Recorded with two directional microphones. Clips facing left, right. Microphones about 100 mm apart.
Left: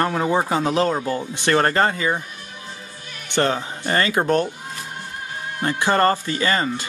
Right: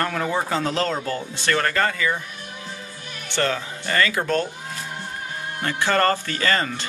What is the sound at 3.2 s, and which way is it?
Speech, 20° left (ahead or behind).